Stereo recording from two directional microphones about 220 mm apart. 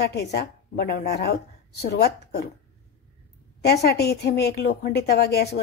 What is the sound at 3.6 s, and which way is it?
A woman's voice, 45° left (ahead or behind).